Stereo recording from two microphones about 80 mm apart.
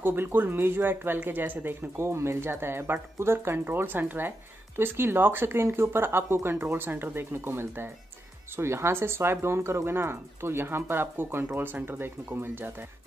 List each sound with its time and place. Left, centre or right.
0.0 s speech: right